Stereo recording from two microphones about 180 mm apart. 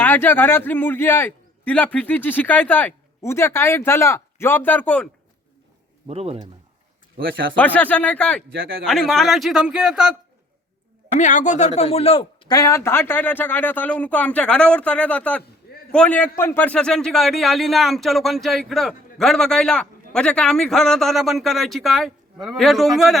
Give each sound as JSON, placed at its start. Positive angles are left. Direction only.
{"t": 0.0, "sound": "a man's voice", "side_deg": 10}
{"t": 6.1, "sound": "speech", "side_deg": -35}
{"t": 7.3, "sound": "speech", "side_deg": -90}
{"t": 7.5, "sound": "a man's voice", "side_deg": 10}
{"t": 11.1, "sound": "speech", "side_deg": 45}
{"t": 12.5, "sound": "a man's voice", "side_deg": 20}